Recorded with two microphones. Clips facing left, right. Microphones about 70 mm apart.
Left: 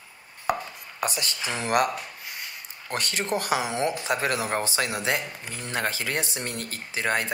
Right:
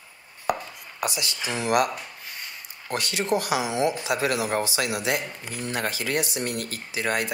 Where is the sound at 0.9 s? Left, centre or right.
Left.